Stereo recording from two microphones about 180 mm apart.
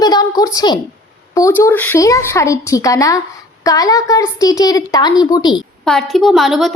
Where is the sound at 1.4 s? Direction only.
15° left (ahead or behind).